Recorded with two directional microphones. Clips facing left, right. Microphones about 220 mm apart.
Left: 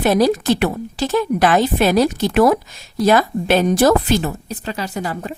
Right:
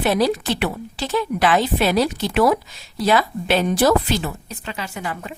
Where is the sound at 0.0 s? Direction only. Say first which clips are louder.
Left 4 dB; 45° left (ahead or behind).